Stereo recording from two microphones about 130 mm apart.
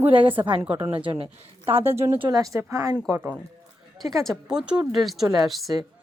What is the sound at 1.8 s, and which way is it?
A woman's voice, 20° right (ahead or behind).